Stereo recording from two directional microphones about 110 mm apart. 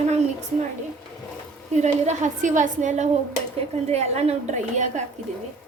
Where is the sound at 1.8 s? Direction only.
90° right.